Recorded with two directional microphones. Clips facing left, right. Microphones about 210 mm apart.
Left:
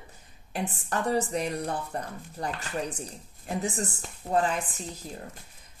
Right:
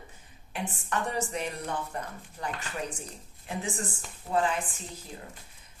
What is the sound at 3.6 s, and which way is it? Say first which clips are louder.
Speech: left 3 dB; 40° left (ahead or behind).